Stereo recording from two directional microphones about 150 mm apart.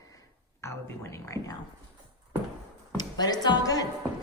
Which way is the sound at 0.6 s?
20° left (ahead or behind).